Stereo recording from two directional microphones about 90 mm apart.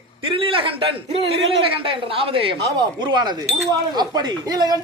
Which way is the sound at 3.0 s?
55° right (ahead or behind).